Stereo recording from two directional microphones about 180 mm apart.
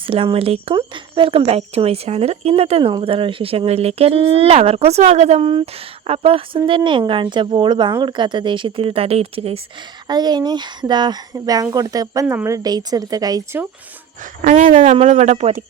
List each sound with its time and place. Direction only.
0.1 s speech: 30° right (ahead or behind)
10.1 s speech: 25° right (ahead or behind)
14.4 s speech: 45° right (ahead or behind)
14.7 s speech: 35° right (ahead or behind)